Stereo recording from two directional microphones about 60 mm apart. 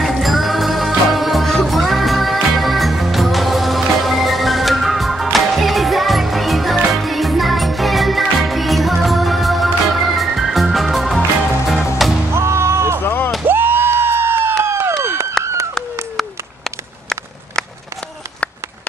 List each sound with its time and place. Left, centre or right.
0.0 s music: centre
12.3 s music: right
13.0 s music: left
13.5 s a sound: right